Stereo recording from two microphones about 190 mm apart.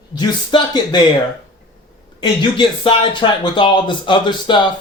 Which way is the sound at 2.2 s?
25° left (ahead or behind).